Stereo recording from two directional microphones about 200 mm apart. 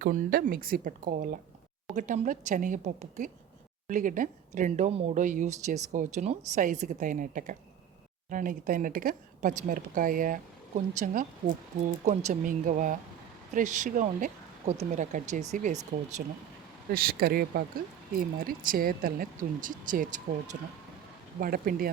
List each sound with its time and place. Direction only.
0.0 s speech: 50° right (ahead or behind)
16.9 s speech: 50° right (ahead or behind)